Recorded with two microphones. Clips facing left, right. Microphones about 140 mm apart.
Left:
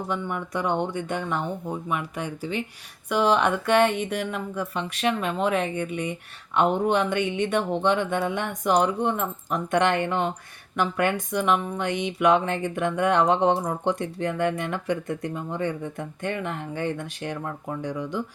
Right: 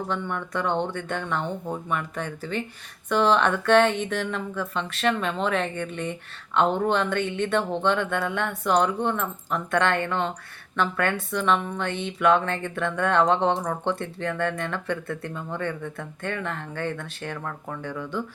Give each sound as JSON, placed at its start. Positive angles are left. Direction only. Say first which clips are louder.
{"t": 0.1, "sound": "a woman's voice", "louder": "even", "side_deg": 10}